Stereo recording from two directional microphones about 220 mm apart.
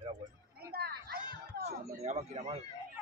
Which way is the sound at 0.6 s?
45° right (ahead or behind).